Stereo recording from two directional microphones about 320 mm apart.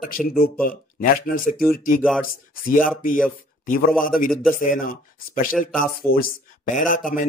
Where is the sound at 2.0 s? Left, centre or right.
Centre.